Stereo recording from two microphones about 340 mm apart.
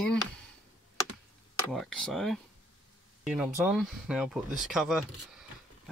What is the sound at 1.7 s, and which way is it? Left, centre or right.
Speech, centre.